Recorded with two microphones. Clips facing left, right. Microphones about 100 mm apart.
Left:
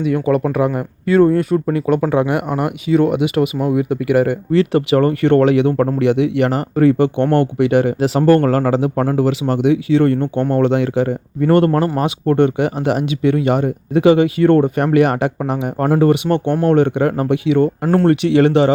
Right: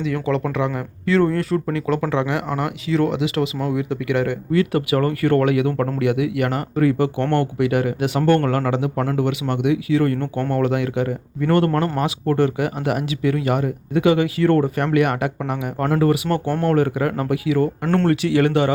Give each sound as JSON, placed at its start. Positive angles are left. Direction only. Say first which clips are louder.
{"t": 0.4, "sound": "speech", "louder": "left 5 dB", "side_deg": 30}
{"t": 17.8, "sound": "speech", "louder": "left 5 dB", "side_deg": 10}
{"t": 18.1, "sound": "speech", "louder": "left 6 dB", "side_deg": 25}